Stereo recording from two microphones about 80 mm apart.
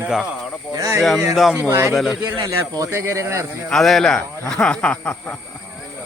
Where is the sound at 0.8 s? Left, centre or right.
Right.